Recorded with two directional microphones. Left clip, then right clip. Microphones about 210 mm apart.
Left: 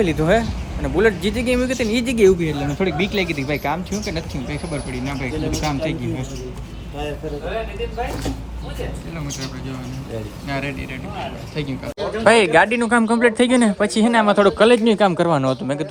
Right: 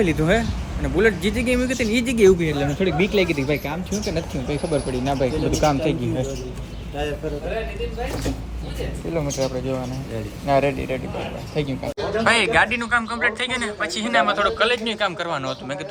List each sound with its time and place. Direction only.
0.0 s speech: centre (ahead or behind)
3.1 s speech: 15° left (ahead or behind)
4.5 s speech: centre (ahead or behind)
5.8 s speech: 15° left (ahead or behind)
8.0 s speech: centre (ahead or behind)
10.4 s speech: 5° left (ahead or behind)